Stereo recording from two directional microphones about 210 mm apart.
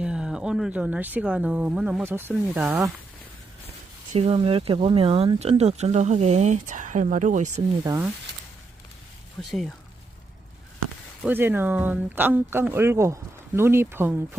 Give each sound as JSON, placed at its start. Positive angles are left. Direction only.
{"t": 0.0, "sound": "speech", "side_deg": -5}
{"t": 4.1, "sound": "speech", "side_deg": -30}
{"t": 7.9, "sound": "speech", "side_deg": -15}
{"t": 9.4, "sound": "speech", "side_deg": 0}
{"t": 11.3, "sound": "speech", "side_deg": -10}